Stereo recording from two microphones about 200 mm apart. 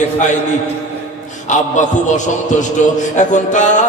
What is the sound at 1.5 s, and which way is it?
Chant, 40° left (ahead or behind).